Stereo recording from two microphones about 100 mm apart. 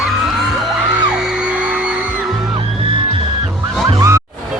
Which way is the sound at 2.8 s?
60° right (ahead or behind).